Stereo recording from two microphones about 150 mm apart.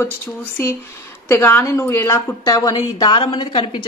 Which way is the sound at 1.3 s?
15° left (ahead or behind).